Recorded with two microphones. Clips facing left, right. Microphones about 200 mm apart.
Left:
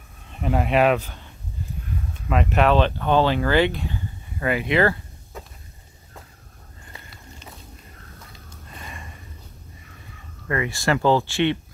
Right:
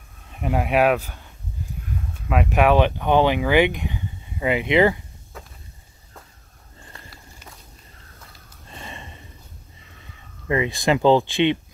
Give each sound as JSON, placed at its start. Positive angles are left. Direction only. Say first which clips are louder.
{"t": 0.3, "sound": "speech", "louder": "even", "side_deg": -5}
{"t": 2.2, "sound": "speech", "louder": "right 1 dB", "side_deg": -10}
{"t": 8.7, "sound": "gasp", "louder": "right 2 dB", "side_deg": -25}
{"t": 10.5, "sound": "speech", "louder": "right 3 dB", "side_deg": -20}